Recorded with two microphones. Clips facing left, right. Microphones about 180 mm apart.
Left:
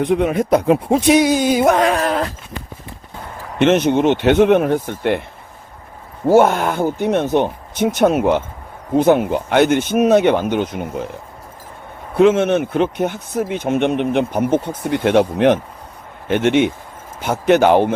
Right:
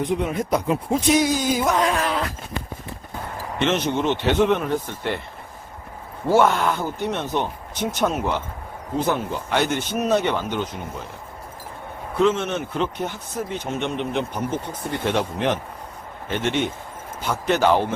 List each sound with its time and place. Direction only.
0.0 s speech: 70° left (ahead or behind)
2.0 s speech: 45° left (ahead or behind)
3.6 s speech: 55° left (ahead or behind)
6.2 s speech: 45° left (ahead or behind)
7.9 s speech: 60° left (ahead or behind)
12.2 s speech: 60° left (ahead or behind)